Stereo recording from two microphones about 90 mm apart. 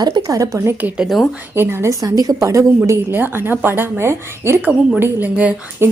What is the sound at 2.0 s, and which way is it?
Speech, 45° right (ahead or behind).